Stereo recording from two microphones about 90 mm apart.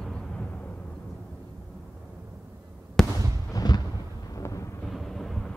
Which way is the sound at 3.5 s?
50° left (ahead or behind).